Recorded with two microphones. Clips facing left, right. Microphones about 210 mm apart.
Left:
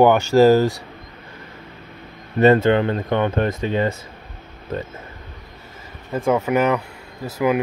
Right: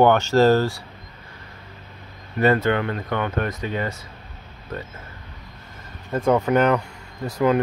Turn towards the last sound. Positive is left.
turn(degrees=5)  # may be behind; listen again after turning